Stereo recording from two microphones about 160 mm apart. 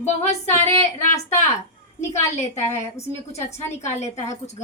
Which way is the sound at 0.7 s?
15° left (ahead or behind).